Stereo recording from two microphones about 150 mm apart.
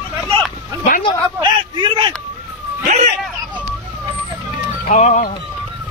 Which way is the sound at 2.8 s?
55° right (ahead or behind).